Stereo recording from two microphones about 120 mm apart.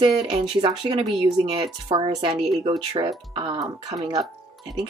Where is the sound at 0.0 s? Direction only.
45° right (ahead or behind).